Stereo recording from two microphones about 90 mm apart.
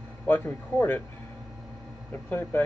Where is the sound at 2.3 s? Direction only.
25° left (ahead or behind).